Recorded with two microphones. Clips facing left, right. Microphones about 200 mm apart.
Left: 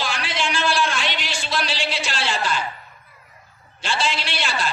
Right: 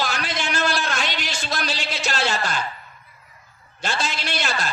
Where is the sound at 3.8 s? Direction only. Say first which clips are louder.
Left 2 dB; 45° right (ahead or behind).